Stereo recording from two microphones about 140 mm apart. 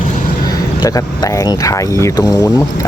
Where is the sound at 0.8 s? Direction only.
25° left (ahead or behind).